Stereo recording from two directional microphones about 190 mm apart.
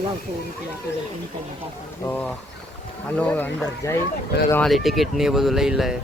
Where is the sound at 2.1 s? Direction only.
10° left (ahead or behind).